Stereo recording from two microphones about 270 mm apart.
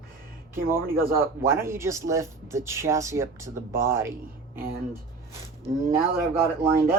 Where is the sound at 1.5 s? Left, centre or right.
Centre.